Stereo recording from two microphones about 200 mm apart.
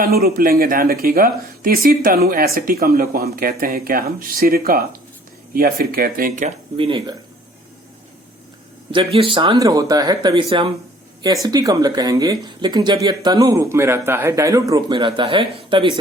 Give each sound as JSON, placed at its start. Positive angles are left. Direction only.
{"t": 0.0, "sound": "speech", "side_deg": -50}
{"t": 6.7, "sound": "speech", "side_deg": -25}
{"t": 8.9, "sound": "speech", "side_deg": -25}